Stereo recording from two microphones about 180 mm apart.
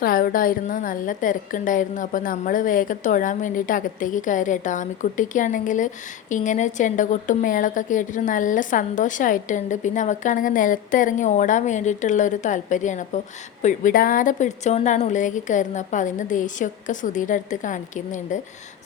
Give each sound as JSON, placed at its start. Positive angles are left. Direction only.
{"t": 0.0, "sound": "a woman's voice", "side_deg": 55}